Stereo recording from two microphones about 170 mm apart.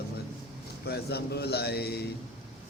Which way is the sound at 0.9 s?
70° left (ahead or behind).